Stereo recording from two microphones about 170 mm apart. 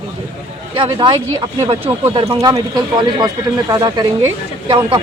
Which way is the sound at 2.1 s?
30° right (ahead or behind).